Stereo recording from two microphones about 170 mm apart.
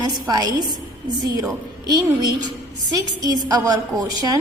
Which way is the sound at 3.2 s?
25° right (ahead or behind).